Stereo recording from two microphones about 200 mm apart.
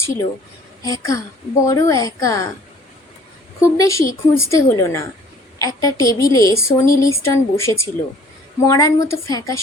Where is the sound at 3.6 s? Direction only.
15° left (ahead or behind).